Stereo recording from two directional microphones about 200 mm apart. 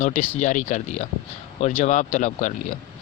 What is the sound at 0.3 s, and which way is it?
Speech, 35° left (ahead or behind).